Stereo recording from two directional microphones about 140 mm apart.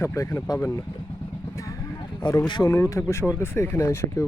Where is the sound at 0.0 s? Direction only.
20° left (ahead or behind).